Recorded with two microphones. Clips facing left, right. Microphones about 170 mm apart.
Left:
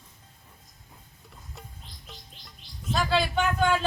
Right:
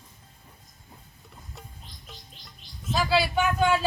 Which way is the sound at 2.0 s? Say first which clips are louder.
Even; centre (ahead or behind).